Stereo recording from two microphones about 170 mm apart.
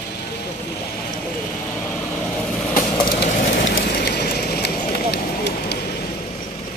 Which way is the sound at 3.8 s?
70° left (ahead or behind).